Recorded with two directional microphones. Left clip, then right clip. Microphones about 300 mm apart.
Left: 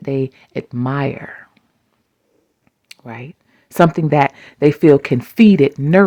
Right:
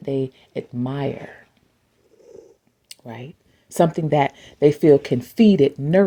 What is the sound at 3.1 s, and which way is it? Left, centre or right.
Speech, centre.